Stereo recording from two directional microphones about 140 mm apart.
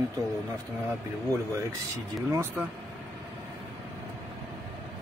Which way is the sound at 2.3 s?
15° right (ahead or behind).